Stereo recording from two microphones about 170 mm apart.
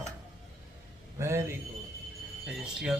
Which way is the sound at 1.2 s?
15° right (ahead or behind).